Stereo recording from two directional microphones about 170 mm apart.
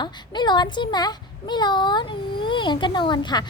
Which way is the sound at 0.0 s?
25° left (ahead or behind).